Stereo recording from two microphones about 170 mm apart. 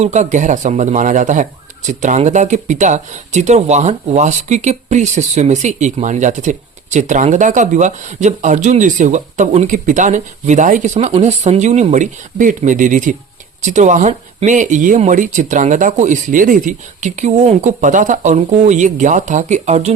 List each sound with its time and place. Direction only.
0.0 s speech: 45° right (ahead or behind)